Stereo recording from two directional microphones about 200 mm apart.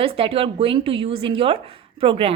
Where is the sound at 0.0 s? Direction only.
30° right (ahead or behind).